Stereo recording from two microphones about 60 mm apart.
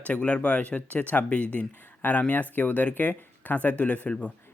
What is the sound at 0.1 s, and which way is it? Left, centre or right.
Speech, left.